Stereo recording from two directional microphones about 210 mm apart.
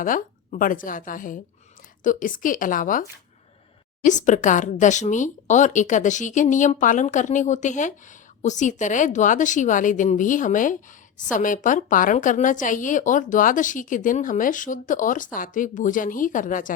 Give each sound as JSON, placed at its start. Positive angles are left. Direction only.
{"t": 0.0, "sound": "speech", "side_deg": 40}
{"t": 4.0, "sound": "speech", "side_deg": 35}